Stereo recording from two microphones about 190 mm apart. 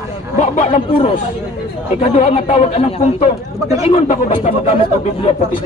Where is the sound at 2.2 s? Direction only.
35° left (ahead or behind).